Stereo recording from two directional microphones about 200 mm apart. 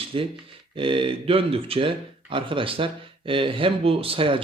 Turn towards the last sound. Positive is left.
turn(degrees=-25)  # may be behind; listen again after turning